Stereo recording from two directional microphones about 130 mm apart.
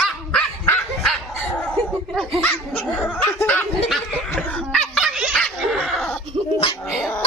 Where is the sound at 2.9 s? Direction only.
15° left (ahead or behind).